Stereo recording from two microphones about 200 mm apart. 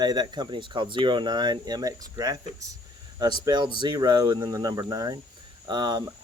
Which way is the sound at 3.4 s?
20° right (ahead or behind).